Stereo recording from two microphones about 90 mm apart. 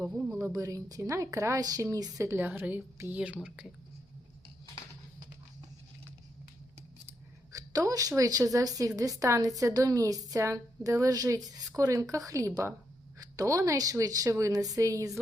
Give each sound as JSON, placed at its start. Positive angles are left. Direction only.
{"t": 0.5, "sound": "a woman's voice", "side_deg": -40}
{"t": 2.3, "sound": "a woman's voice", "side_deg": -20}
{"t": 7.5, "sound": "a woman's voice", "side_deg": -40}